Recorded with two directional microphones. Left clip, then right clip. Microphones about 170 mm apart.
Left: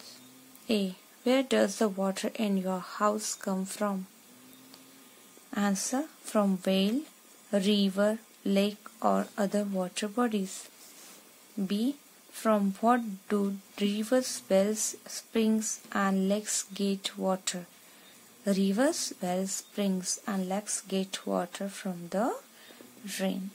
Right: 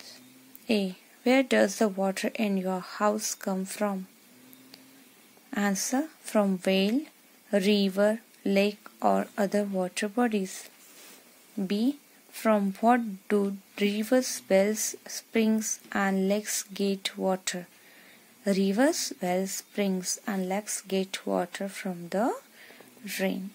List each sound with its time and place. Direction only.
0.7 s a woman's voice: 15° right (ahead or behind)
5.5 s a woman's voice: 20° right (ahead or behind)